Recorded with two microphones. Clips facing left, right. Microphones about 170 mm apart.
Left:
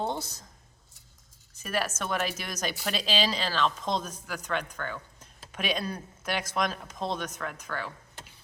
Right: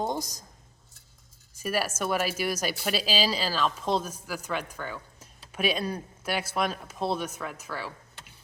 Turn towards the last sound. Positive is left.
turn(degrees=-5)  # may be behind; listen again after turning